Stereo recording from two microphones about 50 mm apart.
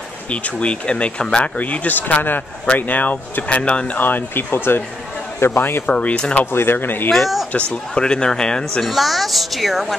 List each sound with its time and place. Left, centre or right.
0.3 s a man's voice: left
4.0 s speech: left
5.9 s speech: left
6.4 s speech: left
7.1 s speech: centre
7.7 s speech: centre
8.8 s speech: centre